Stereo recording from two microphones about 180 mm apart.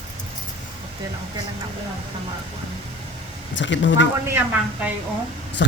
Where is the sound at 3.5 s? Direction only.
90° left.